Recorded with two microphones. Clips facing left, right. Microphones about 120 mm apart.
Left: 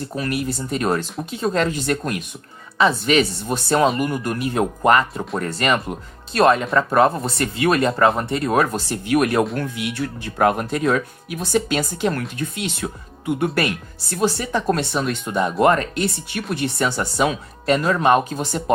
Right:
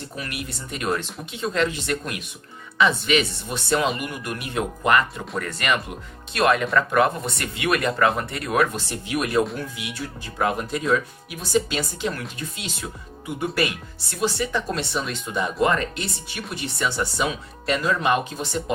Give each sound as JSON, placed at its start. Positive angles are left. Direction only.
{"t": 0.2, "sound": "speech", "side_deg": 35}
{"t": 8.7, "sound": "speech", "side_deg": 50}
{"t": 14.1, "sound": "speech", "side_deg": 40}